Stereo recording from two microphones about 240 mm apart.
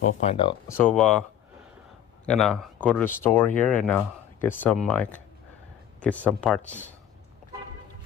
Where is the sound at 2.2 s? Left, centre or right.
Centre.